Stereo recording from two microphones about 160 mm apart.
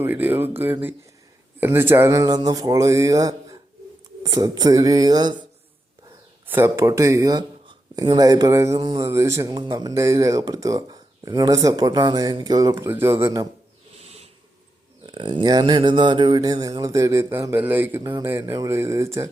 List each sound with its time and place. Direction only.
0.0 s speech: 10° right (ahead or behind)
6.5 s speech: 15° right (ahead or behind)
14.0 s a sound: 40° right (ahead or behind)
15.0 s speech: 30° right (ahead or behind)